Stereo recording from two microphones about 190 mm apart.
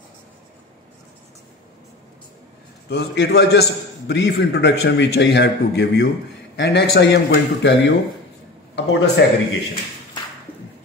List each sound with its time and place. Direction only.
2.9 s a man's voice: 60° left (ahead or behind)